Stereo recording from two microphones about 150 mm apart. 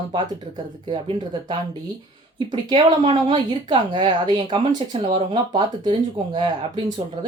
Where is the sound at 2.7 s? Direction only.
35° right (ahead or behind).